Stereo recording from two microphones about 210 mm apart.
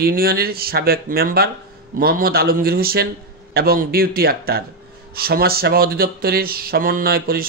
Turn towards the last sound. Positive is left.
turn(degrees=-45)  # may be behind; listen again after turning